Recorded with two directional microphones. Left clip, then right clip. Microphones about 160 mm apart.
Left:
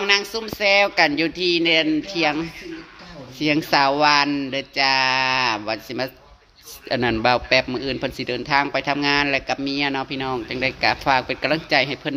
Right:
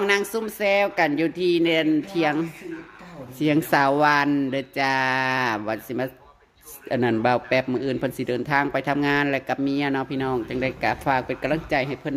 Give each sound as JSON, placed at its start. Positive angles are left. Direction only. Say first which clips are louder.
{"t": 0.6, "sound": "a man's voice", "louder": "left 4 dB", "side_deg": -25}
{"t": 6.9, "sound": "a man's voice", "louder": "left 2 dB", "side_deg": -20}